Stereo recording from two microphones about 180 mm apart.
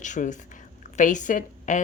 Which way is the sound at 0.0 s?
40° left (ahead or behind).